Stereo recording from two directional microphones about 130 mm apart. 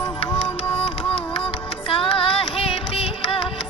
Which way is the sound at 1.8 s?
45° left (ahead or behind).